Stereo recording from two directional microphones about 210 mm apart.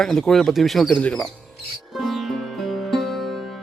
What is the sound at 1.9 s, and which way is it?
Music, centre (ahead or behind).